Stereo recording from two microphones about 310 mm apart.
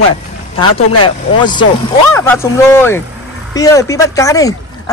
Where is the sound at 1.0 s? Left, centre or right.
Centre.